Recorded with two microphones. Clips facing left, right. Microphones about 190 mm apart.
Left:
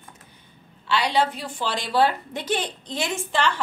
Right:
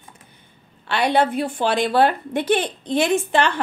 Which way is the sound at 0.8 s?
55° right (ahead or behind).